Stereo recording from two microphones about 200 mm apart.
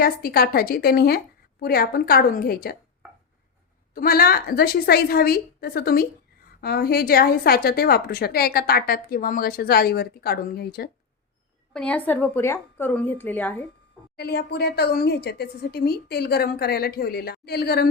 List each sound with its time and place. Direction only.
0.0 s a woman's voice: 50° left (ahead or behind)
3.9 s a woman's voice: 50° left (ahead or behind)
11.7 s speech: 5° left (ahead or behind)
14.2 s a woman's voice: 55° left (ahead or behind)